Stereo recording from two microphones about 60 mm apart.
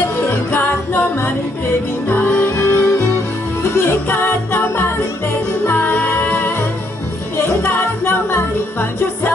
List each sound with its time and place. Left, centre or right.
2.0 s music: left
2.4 s music: left
8.0 s music: left